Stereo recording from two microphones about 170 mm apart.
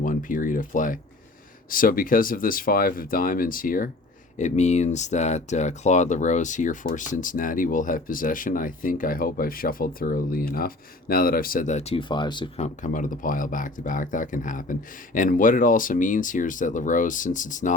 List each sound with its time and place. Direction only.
0.0 s speech: 50° left (ahead or behind)
4.4 s speech: 45° left (ahead or behind); by 12.5 s 25° left (ahead or behind)
12.5 s speech: 45° left (ahead or behind)